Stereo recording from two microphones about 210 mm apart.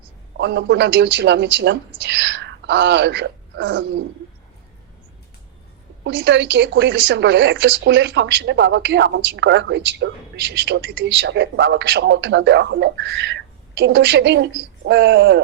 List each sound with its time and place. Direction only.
0.3 s speech: 55° right (ahead or behind)
6.1 s speech: 55° right (ahead or behind)